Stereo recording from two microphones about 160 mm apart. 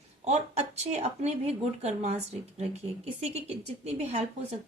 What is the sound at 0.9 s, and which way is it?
A woman's voice, 40° right (ahead or behind).